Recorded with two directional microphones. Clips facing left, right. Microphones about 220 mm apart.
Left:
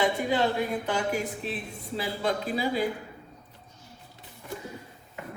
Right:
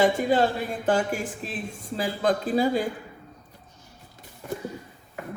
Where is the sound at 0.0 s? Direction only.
45° right (ahead or behind).